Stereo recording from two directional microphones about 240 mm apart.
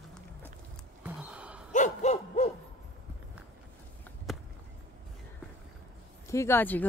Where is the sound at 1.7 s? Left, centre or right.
Left.